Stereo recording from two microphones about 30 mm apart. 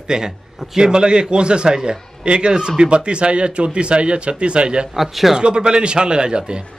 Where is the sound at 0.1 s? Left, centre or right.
Right.